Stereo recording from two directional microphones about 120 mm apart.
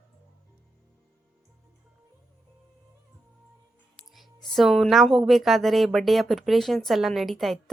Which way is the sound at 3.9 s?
Centre (ahead or behind).